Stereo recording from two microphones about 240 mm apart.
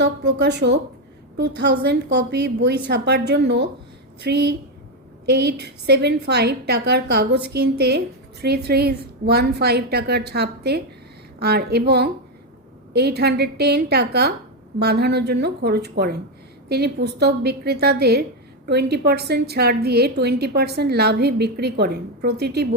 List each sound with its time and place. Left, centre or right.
0.0 s a woman's voice: right